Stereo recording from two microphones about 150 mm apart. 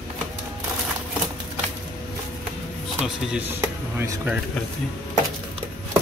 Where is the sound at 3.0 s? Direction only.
5° right (ahead or behind).